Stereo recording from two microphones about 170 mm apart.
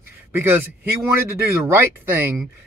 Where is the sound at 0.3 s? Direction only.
10° right (ahead or behind).